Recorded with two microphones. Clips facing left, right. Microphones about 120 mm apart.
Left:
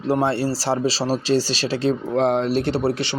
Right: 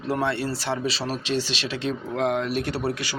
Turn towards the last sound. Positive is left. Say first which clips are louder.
# left 6 dB
turn(degrees=30)  # may be behind; listen again after turning